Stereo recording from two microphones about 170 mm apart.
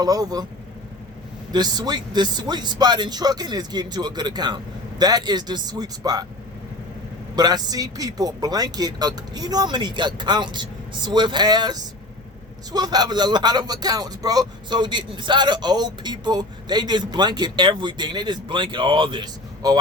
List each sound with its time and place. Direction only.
0.0 s speech: 20° right (ahead or behind)
1.5 s speech: 25° right (ahead or behind)
7.3 s speech: 25° right (ahead or behind)